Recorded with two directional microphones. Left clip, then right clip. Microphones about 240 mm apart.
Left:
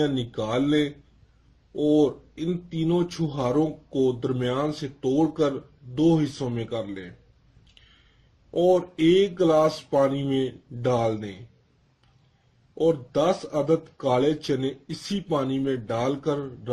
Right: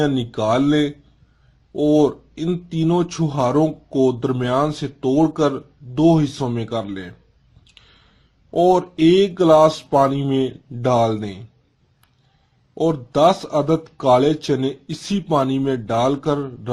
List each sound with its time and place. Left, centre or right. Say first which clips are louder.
0.0 s speech: right 7 dB; right
8.6 s speech: right 5 dB; right
12.7 s speech: right 3 dB; right